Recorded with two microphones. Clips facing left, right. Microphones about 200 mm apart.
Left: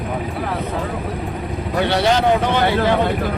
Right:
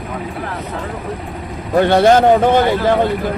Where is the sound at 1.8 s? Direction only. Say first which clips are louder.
Right 6 dB; 50° right (ahead or behind).